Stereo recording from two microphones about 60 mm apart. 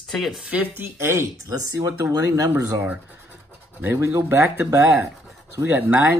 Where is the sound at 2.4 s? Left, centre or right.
Right.